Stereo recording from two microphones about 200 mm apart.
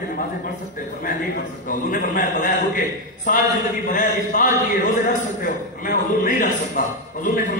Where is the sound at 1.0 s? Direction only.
40° left (ahead or behind).